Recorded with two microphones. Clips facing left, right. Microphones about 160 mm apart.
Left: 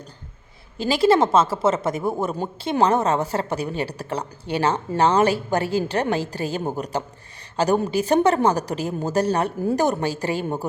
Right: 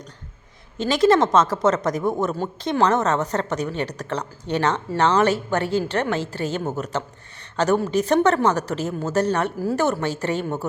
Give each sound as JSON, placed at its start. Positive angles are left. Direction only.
{"t": 0.8, "sound": "a woman's voice", "side_deg": 5}